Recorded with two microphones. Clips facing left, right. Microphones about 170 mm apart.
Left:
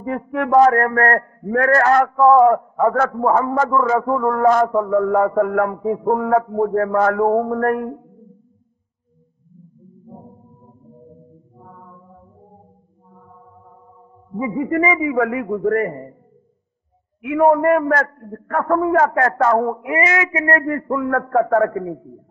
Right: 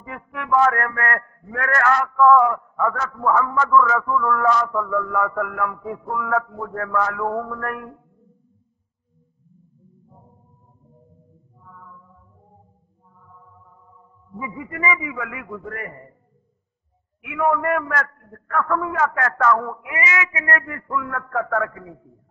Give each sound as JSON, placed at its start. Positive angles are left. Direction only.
{"t": 0.0, "sound": "a man's voice", "side_deg": 35}
{"t": 4.5, "sound": "a sound", "side_deg": 50}
{"t": 4.7, "sound": "a man's voice", "side_deg": 35}
{"t": 7.0, "sound": "a man's voice", "side_deg": 55}
{"t": 7.2, "sound": "a man's voice", "side_deg": 25}
{"t": 10.0, "sound": "music", "side_deg": 40}
{"t": 11.7, "sound": "chant", "side_deg": 30}
{"t": 13.1, "sound": "chant", "side_deg": 45}
{"t": 14.3, "sound": "a man's voice", "side_deg": 40}
{"t": 17.2, "sound": "a man's voice", "side_deg": 35}